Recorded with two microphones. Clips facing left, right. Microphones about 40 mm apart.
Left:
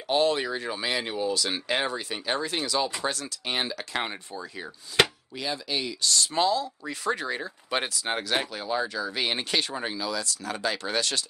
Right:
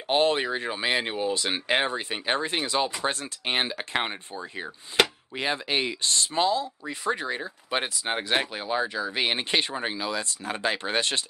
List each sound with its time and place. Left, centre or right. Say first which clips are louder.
0.1 s speech: right 1 dB; right
7.1 s speech: even; centre
8.2 s speech: right 4 dB; right